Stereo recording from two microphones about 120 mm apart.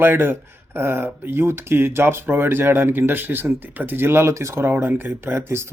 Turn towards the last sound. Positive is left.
turn(degrees=-20)  # may be behind; listen again after turning